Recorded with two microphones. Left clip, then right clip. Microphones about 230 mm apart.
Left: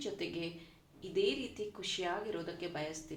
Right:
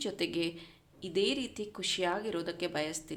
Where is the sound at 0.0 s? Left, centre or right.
Right.